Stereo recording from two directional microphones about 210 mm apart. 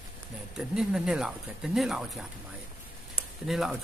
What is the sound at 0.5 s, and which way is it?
A man's voice, 5° right (ahead or behind).